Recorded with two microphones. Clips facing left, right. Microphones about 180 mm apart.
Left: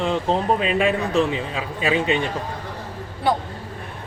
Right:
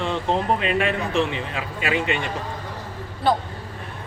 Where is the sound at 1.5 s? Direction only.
20° left (ahead or behind).